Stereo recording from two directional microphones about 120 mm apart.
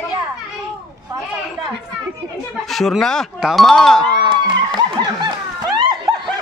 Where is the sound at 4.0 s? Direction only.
40° right (ahead or behind).